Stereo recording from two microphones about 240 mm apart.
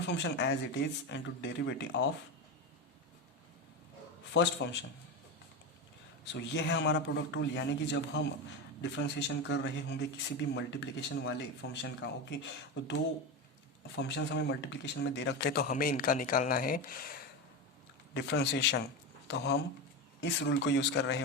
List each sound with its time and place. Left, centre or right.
0.1 s a man's voice: left
4.4 s a man's voice: left
6.3 s a man's voice: left
13.9 s a man's voice: left